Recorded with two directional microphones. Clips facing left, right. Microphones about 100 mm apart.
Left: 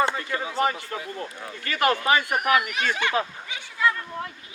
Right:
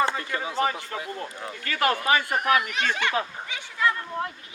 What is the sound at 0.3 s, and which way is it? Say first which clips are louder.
Speech: left 1 dB; 20° left (ahead or behind).